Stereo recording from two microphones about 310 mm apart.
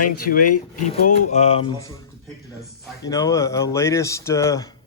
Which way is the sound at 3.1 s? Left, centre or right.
Centre.